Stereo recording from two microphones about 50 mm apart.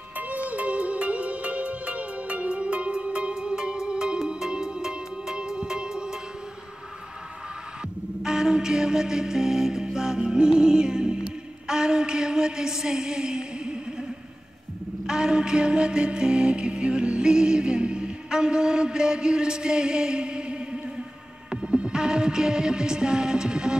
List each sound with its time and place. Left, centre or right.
0.3 s music: right
8.2 s music: centre
15.0 s music: centre